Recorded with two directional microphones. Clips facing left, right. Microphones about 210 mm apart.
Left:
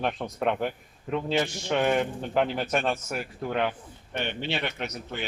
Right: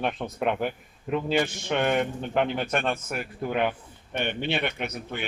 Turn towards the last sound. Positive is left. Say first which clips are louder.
# right 1 dB
turn(degrees=-55)  # may be behind; listen again after turning